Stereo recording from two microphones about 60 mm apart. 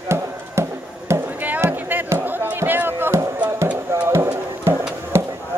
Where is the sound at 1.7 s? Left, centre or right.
Right.